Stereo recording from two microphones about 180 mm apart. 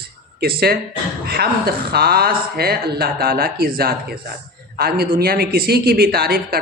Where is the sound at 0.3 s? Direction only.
60° right (ahead or behind).